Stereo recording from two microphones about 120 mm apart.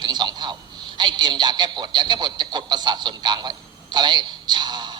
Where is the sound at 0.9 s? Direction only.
40° right (ahead or behind).